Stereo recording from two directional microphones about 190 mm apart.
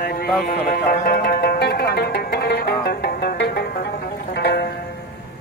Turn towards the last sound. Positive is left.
turn(degrees=60)  # may be behind; listen again after turning